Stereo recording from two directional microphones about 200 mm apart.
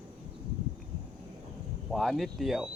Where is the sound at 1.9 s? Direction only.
Centre (ahead or behind).